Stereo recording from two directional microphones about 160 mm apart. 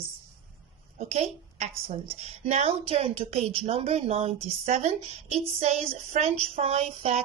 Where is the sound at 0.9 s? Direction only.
45° right (ahead or behind).